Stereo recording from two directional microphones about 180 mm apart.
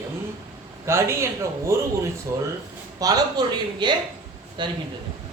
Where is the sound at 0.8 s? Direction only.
15° right (ahead or behind).